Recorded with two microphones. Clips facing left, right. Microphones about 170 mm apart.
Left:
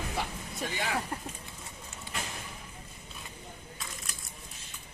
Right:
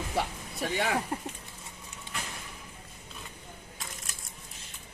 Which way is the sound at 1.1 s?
20° right (ahead or behind).